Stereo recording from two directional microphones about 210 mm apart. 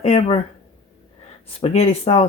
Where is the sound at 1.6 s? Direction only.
30° left (ahead or behind).